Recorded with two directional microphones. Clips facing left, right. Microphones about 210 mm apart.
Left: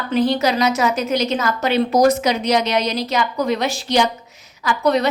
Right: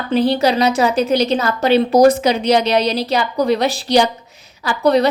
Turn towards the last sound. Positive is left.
turn(degrees=-35)  # may be behind; listen again after turning